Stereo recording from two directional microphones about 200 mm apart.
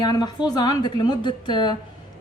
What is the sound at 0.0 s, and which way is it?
A woman's voice, 20° left (ahead or behind).